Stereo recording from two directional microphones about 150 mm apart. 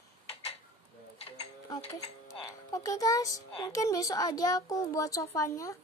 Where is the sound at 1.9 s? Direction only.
25° left (ahead or behind).